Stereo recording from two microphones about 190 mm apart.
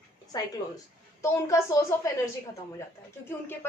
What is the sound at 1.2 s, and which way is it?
Speech, 15° left (ahead or behind).